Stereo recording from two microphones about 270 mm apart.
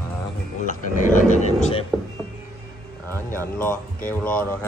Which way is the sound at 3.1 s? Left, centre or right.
Centre.